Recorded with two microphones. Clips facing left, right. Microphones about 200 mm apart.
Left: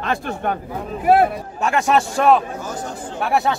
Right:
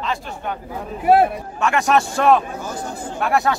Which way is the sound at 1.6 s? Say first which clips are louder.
Even; 35° left (ahead or behind).